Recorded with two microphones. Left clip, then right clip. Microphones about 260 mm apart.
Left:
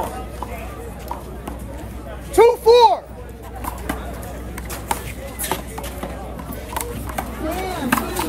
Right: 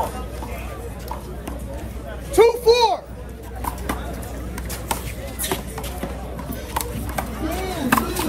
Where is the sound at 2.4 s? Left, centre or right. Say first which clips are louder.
Left 3 dB; left.